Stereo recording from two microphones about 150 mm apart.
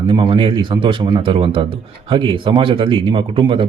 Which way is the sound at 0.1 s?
35° right (ahead or behind).